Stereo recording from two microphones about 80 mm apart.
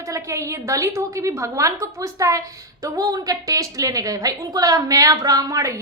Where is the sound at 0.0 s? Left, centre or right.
Right.